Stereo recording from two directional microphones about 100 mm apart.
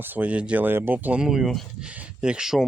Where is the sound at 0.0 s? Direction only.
15° right (ahead or behind).